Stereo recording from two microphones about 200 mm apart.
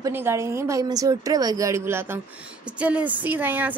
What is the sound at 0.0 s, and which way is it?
A woman's voice, 10° right (ahead or behind).